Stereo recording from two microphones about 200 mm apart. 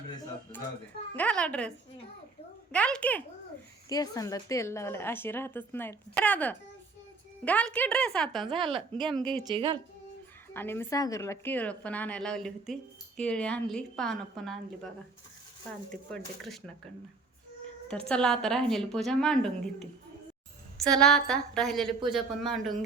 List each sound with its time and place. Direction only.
1.1 s a woman's voice: 5° left (ahead or behind)
2.7 s a woman's voice: 5° left (ahead or behind)
3.8 s a woman's voice: 15° left (ahead or behind); by 9.3 s centre (ahead or behind)
9.4 s a woman's voice: 25° right (ahead or behind)
10.5 s a woman's voice: 10° left (ahead or behind)
16.1 s a woman's voice: 5° left (ahead or behind)
18.1 s a woman's voice: 5° left (ahead or behind)